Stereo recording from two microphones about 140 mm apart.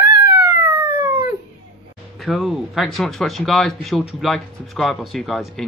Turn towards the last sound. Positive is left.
turn(degrees=0)  # may be behind; listen again after turning